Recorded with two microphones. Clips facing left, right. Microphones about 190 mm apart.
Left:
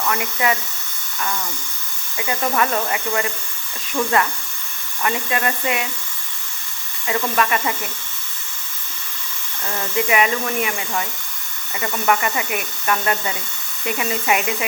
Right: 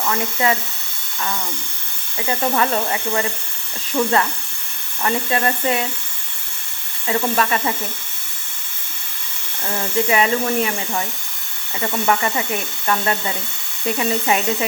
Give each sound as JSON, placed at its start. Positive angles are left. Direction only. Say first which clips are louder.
{"t": 0.1, "sound": "speech", "louder": "right 2 dB", "side_deg": -25}
{"t": 2.1, "sound": "speech", "louder": "right 1 dB", "side_deg": -30}
{"t": 7.1, "sound": "speech", "louder": "right 1 dB", "side_deg": -25}
{"t": 9.9, "sound": "speech", "louder": "right 1 dB", "side_deg": -30}